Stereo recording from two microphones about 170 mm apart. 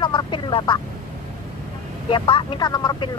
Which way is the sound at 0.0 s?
30° left (ahead or behind).